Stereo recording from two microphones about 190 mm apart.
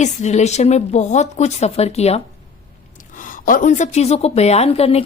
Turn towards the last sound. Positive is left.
turn(degrees=30)  # may be behind; listen again after turning